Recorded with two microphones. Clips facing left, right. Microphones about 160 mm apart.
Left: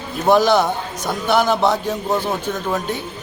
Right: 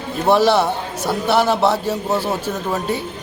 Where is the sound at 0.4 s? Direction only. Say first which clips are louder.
Even; 30° right (ahead or behind).